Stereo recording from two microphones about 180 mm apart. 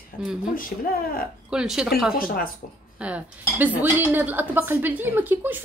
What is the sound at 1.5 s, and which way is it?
Speech, 5° right (ahead or behind).